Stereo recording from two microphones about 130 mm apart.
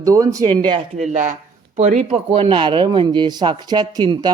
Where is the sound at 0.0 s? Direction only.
25° right (ahead or behind).